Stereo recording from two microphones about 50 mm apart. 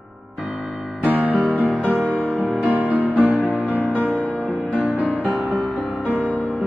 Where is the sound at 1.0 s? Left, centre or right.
Right.